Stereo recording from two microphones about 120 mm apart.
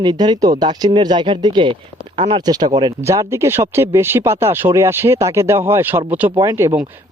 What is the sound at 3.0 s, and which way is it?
A man's voice, 25° right (ahead or behind).